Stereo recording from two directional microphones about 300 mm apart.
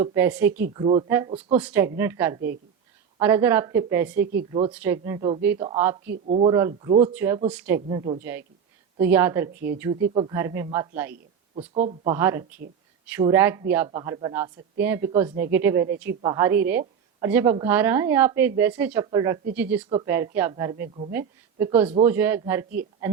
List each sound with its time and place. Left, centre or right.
0.0 s a woman's voice: centre
0.7 s a woman's voice: centre
6.1 s speech: right
6.5 s a woman's voice: centre
11.7 s speech: centre
12.1 s a woman's voice: centre